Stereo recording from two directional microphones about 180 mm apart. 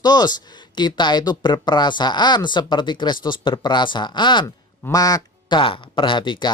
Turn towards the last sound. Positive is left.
turn(degrees=25)  # may be behind; listen again after turning